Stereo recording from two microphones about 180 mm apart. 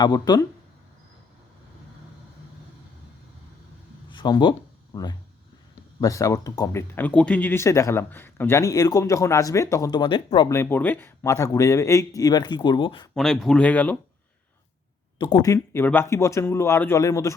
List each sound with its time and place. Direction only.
0.0 s speech: 20° left (ahead or behind)
4.1 s speech: 25° left (ahead or behind)
10.5 s speech: 10° left (ahead or behind)
13.1 s speech: centre (ahead or behind)
15.2 s speech: 25° left (ahead or behind)